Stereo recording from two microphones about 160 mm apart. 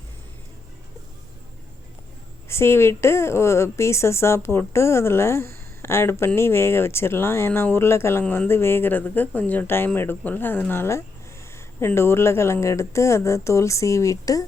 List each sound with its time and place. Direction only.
2.5 s speech: 15° left (ahead or behind)